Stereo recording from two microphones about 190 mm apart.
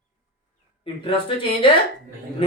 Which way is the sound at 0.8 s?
25° left (ahead or behind).